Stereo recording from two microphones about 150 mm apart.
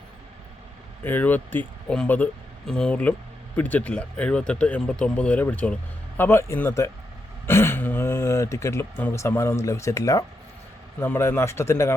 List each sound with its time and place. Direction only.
1.0 s speech: 10° left (ahead or behind)